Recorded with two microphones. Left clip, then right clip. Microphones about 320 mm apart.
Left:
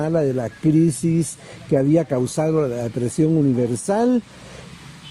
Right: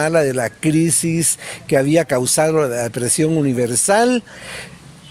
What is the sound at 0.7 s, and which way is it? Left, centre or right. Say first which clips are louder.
Speech: left 2 dB; right.